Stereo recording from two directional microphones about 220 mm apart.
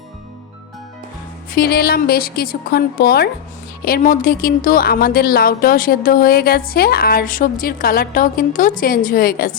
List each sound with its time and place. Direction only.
1.5 s a woman's voice: 45° left (ahead or behind)